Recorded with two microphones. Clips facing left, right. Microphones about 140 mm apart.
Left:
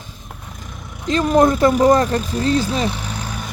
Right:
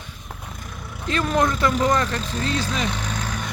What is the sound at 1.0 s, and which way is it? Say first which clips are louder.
Speech: left 7 dB; 35° left (ahead or behind).